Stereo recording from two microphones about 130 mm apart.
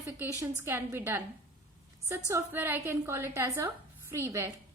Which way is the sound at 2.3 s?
20° right (ahead or behind).